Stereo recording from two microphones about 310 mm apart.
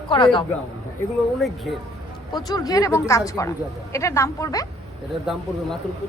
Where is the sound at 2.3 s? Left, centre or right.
Centre.